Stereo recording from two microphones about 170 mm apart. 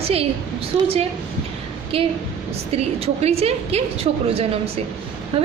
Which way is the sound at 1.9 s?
35° right (ahead or behind).